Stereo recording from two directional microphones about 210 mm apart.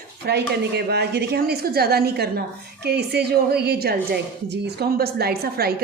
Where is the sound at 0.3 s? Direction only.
50° right (ahead or behind).